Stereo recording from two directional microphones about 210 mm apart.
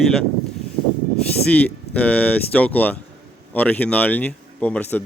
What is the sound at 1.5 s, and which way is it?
Speech, 5° left (ahead or behind).